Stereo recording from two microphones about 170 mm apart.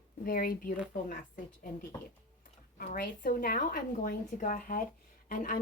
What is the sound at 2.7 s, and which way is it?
A woman's voice, 60° left (ahead or behind).